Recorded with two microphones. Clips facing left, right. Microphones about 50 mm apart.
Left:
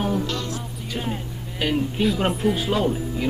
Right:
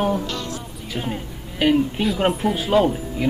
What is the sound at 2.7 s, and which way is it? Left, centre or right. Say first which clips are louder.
Speech: right 4 dB; right.